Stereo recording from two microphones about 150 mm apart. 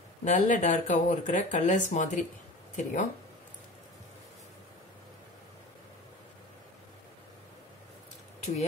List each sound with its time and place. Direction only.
0.2 s speech: 55° left (ahead or behind)